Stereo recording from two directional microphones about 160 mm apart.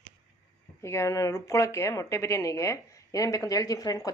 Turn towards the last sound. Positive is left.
turn(degrees=20)  # may be behind; listen again after turning